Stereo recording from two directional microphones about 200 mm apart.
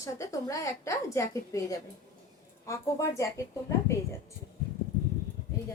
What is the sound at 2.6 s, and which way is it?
A woman's voice, 15° left (ahead or behind).